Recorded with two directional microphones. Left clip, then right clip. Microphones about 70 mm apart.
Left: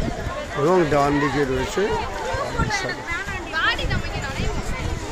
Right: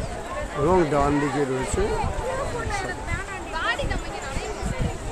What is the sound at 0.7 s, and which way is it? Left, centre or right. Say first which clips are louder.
Speech: left 2 dB; centre.